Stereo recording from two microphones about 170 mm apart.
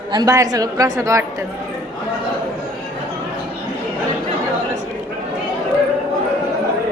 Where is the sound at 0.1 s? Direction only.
25° right (ahead or behind).